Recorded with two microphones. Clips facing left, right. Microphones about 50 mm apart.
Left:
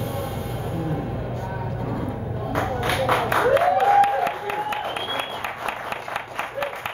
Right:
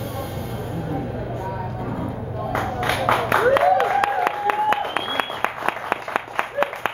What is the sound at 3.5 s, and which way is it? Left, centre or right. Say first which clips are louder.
Applause: left 1 dB; right.